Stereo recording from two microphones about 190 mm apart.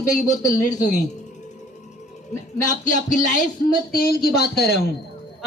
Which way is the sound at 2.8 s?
40° left (ahead or behind).